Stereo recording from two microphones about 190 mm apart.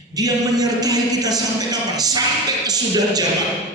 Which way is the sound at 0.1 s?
20° right (ahead or behind).